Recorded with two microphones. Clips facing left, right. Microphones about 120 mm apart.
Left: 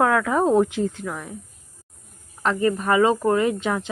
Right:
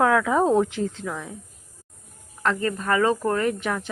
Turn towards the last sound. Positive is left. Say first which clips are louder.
# left 3 dB
turn(degrees=15)  # may be behind; listen again after turning